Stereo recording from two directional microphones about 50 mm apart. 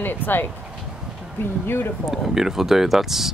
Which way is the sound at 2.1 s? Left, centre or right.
Centre.